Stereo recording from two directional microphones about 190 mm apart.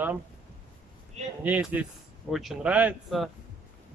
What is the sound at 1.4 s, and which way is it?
Speech, 10° right (ahead or behind).